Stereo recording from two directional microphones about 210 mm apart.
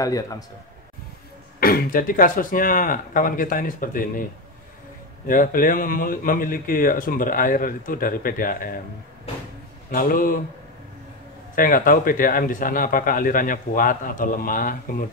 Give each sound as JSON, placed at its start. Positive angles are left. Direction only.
{"t": 0.0, "sound": "a man's voice", "side_deg": 15}
{"t": 1.6, "sound": "speech", "side_deg": 45}
{"t": 9.8, "sound": "speech", "side_deg": 40}
{"t": 11.5, "sound": "speech", "side_deg": 40}